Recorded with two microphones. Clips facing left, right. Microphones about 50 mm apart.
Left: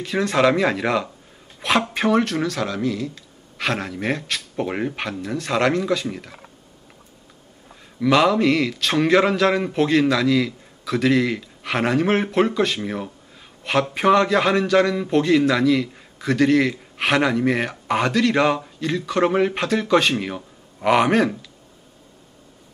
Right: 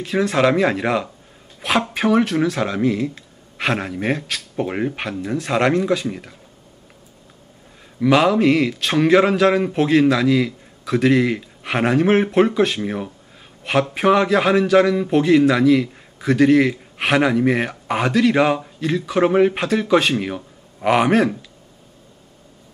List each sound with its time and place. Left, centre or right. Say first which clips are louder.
0.0 s a man's voice: right 1 dB; centre; by 3.1 s right
3.5 s a man's voice: right 3 dB; centre
8.0 s a man's voice: right 2 dB; centre